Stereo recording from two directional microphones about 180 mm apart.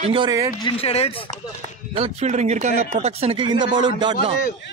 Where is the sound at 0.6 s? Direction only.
35° left (ahead or behind).